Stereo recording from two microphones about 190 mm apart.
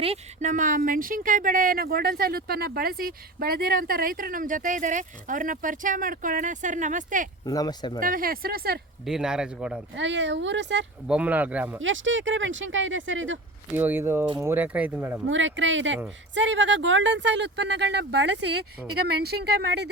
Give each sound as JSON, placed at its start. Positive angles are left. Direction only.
{"t": 0.0, "sound": "speech", "side_deg": -35}
{"t": 7.4, "sound": "speech", "side_deg": 20}
{"t": 7.9, "sound": "speech", "side_deg": -45}
{"t": 9.0, "sound": "a man's voice", "side_deg": -5}
{"t": 9.9, "sound": "speech", "side_deg": -70}
{"t": 11.1, "sound": "speech", "side_deg": -5}
{"t": 11.8, "sound": "speech", "side_deg": -90}
{"t": 13.7, "sound": "speech", "side_deg": -10}
{"t": 15.3, "sound": "a woman's voice", "side_deg": -80}